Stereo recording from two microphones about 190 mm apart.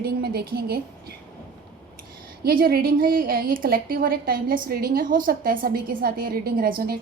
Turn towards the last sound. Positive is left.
turn(degrees=-50)  # may be behind; listen again after turning